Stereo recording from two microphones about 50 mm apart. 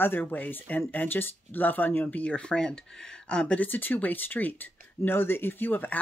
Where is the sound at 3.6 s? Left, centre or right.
Left.